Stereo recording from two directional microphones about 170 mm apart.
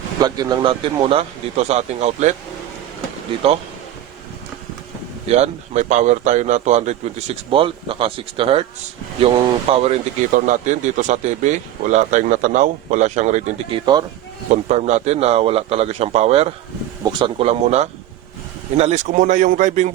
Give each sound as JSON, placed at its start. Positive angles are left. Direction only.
{"t": 0.2, "sound": "a man's voice", "side_deg": -20}
{"t": 5.3, "sound": "a man's voice", "side_deg": -40}
{"t": 13.7, "sound": "speech", "side_deg": -25}
{"t": 14.5, "sound": "a man's voice", "side_deg": -40}
{"t": 17.0, "sound": "a man's voice", "side_deg": -25}